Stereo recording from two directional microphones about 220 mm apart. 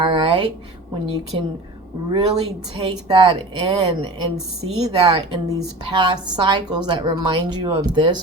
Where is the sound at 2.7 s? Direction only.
20° right (ahead or behind).